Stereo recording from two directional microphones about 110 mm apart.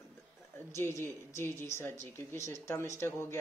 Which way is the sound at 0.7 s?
25° left (ahead or behind).